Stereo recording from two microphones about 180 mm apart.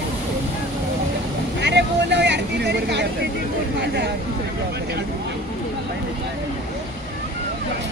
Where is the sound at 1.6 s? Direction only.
70° right (ahead or behind).